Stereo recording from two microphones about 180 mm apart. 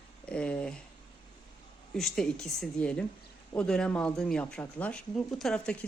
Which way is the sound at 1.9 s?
Centre (ahead or behind).